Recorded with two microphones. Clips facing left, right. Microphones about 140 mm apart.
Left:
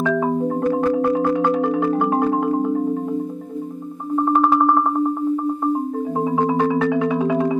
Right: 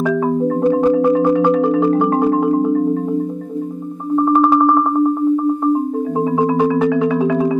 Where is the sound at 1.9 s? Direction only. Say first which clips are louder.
Right 4 dB; centre (ahead or behind).